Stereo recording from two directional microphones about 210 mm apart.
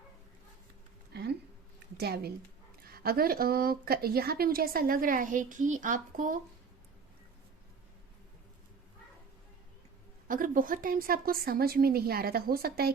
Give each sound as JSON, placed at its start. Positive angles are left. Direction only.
{"t": 1.1, "sound": "a sound", "side_deg": -50}
{"t": 2.0, "sound": "a woman's voice", "side_deg": -50}
{"t": 10.2, "sound": "a woman's voice", "side_deg": -40}